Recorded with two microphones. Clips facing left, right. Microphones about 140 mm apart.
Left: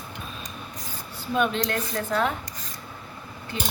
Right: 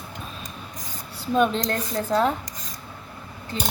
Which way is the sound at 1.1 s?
35° right (ahead or behind).